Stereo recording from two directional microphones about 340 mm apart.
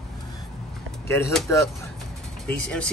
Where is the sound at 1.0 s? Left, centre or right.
Centre.